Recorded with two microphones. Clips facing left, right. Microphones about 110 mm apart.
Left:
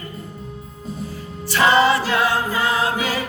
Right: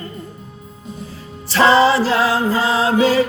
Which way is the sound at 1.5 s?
30° right (ahead or behind).